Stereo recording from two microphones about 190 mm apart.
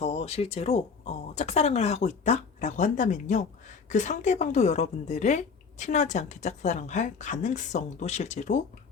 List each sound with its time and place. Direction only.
0.0 s a woman's voice: 35° left (ahead or behind)